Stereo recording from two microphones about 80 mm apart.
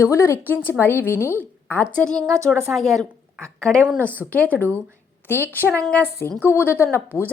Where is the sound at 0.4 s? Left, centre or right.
Left.